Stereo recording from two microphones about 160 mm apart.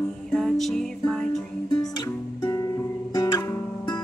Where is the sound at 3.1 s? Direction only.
20° left (ahead or behind).